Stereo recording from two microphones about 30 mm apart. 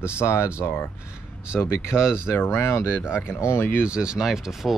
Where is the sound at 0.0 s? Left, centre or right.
Right.